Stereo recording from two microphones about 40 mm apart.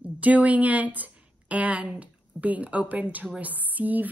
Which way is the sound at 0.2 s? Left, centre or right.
Right.